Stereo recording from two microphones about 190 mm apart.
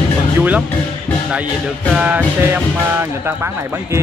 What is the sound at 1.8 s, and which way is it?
Speech, 5° right (ahead or behind).